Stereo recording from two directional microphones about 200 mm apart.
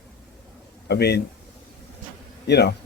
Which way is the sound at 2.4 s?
55° left (ahead or behind).